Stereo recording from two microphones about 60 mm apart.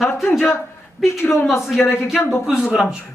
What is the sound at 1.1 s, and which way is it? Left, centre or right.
Speech, left.